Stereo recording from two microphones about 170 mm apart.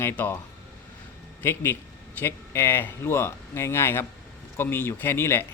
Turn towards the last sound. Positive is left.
turn(degrees=15)  # may be behind; listen again after turning